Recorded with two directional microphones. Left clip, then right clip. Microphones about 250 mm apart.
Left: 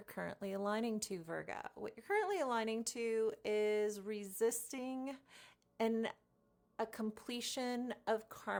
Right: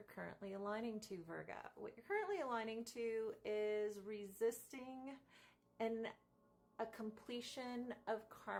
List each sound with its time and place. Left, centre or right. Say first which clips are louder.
0.0 s speech: left 7 dB; left